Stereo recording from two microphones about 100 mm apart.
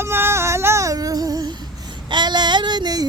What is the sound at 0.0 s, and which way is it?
Music, 25° right (ahead or behind).